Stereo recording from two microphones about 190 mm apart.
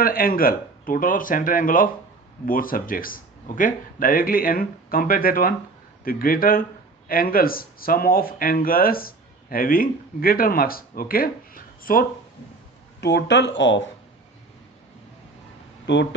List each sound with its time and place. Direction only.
0.0 s speech: 50° left (ahead or behind)
13.0 s speech: 65° left (ahead or behind)
15.9 s speech: 65° left (ahead or behind)